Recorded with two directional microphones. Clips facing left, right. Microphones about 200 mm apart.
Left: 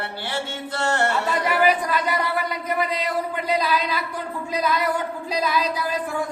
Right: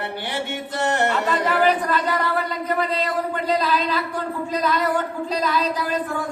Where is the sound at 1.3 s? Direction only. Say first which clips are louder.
Right 1 dB; 15° left (ahead or behind).